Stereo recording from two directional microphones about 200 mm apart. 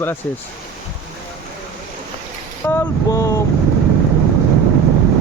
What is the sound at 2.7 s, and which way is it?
Speech, 15° left (ahead or behind).